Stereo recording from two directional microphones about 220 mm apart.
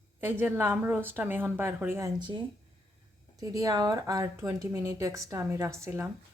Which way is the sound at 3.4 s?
15° right (ahead or behind).